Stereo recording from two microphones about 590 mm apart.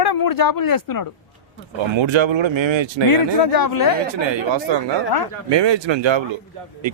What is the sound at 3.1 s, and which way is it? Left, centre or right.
Speech, left.